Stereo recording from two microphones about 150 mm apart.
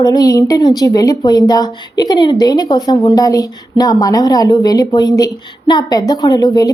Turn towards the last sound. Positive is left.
turn(degrees=25)  # may be behind; listen again after turning